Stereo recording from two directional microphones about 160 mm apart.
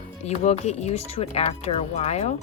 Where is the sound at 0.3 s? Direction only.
45° left (ahead or behind).